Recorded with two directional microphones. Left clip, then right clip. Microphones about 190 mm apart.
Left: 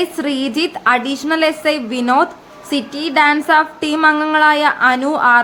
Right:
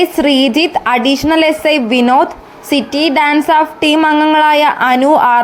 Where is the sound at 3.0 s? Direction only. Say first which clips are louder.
Right 1 dB; 20° right (ahead or behind).